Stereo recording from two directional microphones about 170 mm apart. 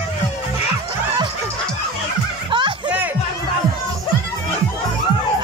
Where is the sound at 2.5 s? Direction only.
30° right (ahead or behind).